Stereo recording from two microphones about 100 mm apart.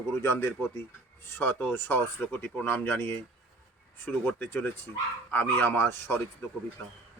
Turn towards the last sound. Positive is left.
turn(degrees=20)  # may be behind; listen again after turning